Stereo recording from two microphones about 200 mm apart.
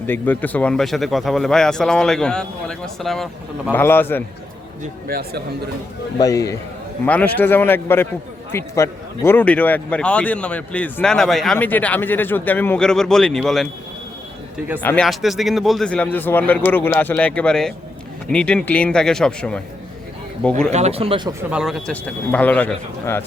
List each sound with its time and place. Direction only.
0.1 s a man's voice: 10° left (ahead or behind)
5.0 s a man's voice: 50° right (ahead or behind)
6.1 s a man's voice: 15° left (ahead or behind); by 13.7 s centre (ahead or behind)
14.8 s a man's voice: 5° left (ahead or behind)
20.7 s speech: 30° right (ahead or behind)
21.5 s a man's voice: centre (ahead or behind)